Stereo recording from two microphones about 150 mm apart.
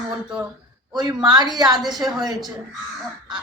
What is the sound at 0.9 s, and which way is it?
Speech, 30° right (ahead or behind).